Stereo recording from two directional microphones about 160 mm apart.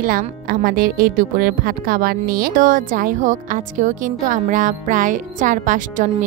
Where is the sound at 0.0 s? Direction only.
65° right (ahead or behind).